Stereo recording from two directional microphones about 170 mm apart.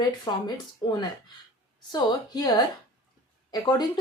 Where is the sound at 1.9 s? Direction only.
25° left (ahead or behind).